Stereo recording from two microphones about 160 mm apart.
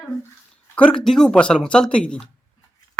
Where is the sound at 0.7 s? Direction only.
5° left (ahead or behind).